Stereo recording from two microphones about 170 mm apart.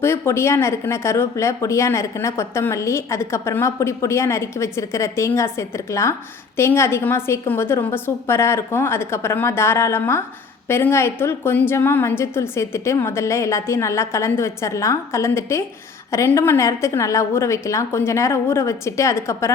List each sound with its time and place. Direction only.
0.0 s speech: 15° left (ahead or behind)